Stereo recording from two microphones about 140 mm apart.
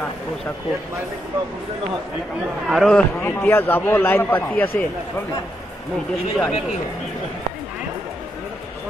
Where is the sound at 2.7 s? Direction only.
Centre (ahead or behind).